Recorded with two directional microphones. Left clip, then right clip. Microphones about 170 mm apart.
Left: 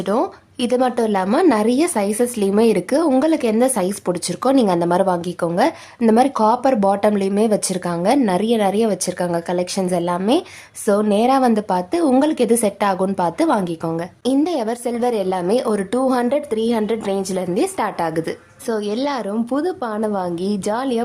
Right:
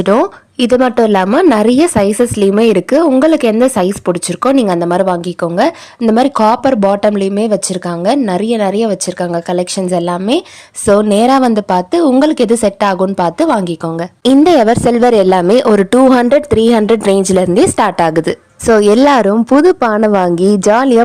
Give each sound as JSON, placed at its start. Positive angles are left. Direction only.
{"t": 0.0, "sound": "a woman's voice", "side_deg": -30}
{"t": 14.4, "sound": "a woman's voice", "side_deg": -45}